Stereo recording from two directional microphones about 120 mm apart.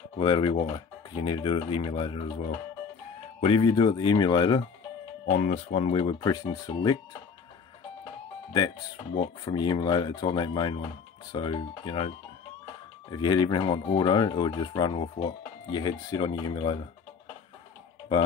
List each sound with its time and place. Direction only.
0.2 s speech: 40° left (ahead or behind)
3.3 s speech: 50° left (ahead or behind)
5.3 s speech: 85° left; by 5.9 s 65° left (ahead or behind)
6.1 s speech: 30° left (ahead or behind)
8.5 s speech: 35° left (ahead or behind)
13.1 s speech: 35° left (ahead or behind)